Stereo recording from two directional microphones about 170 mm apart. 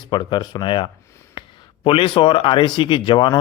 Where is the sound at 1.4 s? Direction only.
30° left (ahead or behind).